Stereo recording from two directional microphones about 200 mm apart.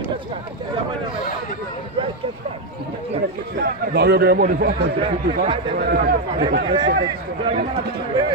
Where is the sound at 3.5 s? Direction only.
55° right (ahead or behind).